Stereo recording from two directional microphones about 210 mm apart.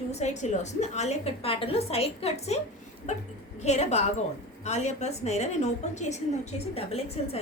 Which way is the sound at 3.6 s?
35° left (ahead or behind).